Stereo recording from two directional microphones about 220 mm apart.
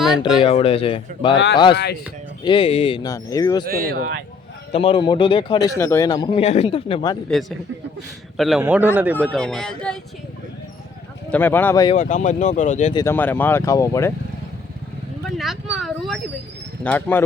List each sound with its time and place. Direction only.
0.4 s speech: 25° left (ahead or behind)
1.7 s speech: 50° left (ahead or behind)
2.4 s speech: 20° left (ahead or behind)
3.7 s speech: 45° right (ahead or behind)
4.7 s speech: 25° left (ahead or behind)
5.7 s speech: 10° left (ahead or behind)
8.4 s a man's voice: centre (ahead or behind)
9.2 s speech: centre (ahead or behind)
11.3 s speech: 10° left (ahead or behind)
11.9 s speech: 35° left (ahead or behind)
12.9 s speech: 15° left (ahead or behind)
15.4 s speech: centre (ahead or behind)